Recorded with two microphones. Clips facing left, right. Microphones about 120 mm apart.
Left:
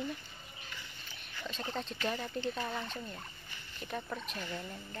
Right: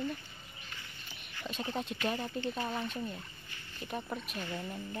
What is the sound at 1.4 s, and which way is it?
Speech, 5° right (ahead or behind).